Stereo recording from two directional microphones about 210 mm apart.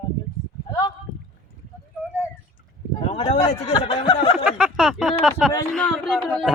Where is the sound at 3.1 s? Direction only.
30° left (ahead or behind).